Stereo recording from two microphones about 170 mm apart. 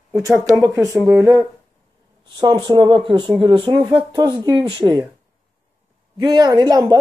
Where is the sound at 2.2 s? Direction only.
25° right (ahead or behind).